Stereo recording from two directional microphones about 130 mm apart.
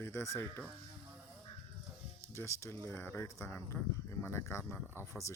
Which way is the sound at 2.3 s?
20° left (ahead or behind).